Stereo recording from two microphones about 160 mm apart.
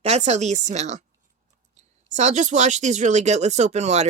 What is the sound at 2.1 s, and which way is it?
Speech, 45° right (ahead or behind).